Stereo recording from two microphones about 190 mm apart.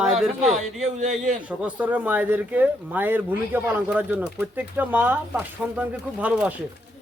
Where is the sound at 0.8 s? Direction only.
40° right (ahead or behind).